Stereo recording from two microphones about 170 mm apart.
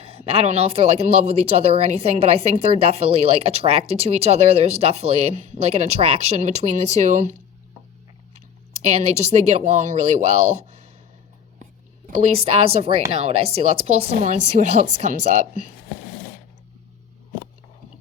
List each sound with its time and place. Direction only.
0.0 s speech: 35° right (ahead or behind)
8.7 s speech: 40° right (ahead or behind)
12.5 s speech: 35° right (ahead or behind)